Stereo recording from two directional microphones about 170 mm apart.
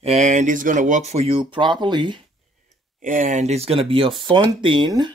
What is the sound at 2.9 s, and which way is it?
Speech, 50° right (ahead or behind).